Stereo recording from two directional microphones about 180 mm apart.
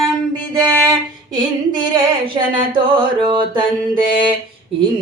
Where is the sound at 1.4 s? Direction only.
25° right (ahead or behind).